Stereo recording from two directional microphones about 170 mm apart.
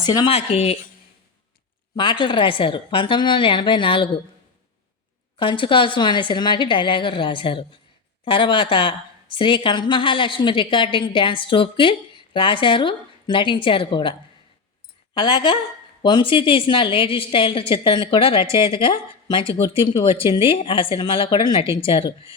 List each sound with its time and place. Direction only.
0.0 s speech: 20° left (ahead or behind)
0.3 s speech: 35° left (ahead or behind)
2.0 s a woman's voice: 30° left (ahead or behind)
5.4 s a woman's voice: 30° left (ahead or behind)